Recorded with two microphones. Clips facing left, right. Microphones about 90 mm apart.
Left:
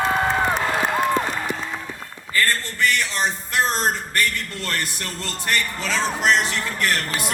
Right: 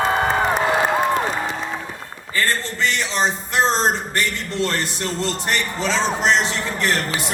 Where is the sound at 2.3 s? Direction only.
20° right (ahead or behind).